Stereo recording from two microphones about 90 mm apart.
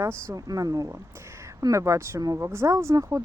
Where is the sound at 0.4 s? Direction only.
40° right (ahead or behind).